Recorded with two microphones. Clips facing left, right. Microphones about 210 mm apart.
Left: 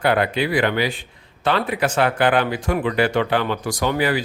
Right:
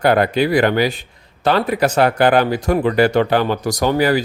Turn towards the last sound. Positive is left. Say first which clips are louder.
# right 5 dB
turn(degrees=-40)  # may be behind; listen again after turning